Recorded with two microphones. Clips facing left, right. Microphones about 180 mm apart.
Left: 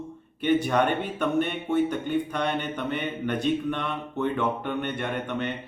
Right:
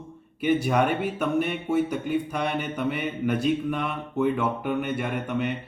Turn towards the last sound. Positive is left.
turn(degrees=-5)  # may be behind; listen again after turning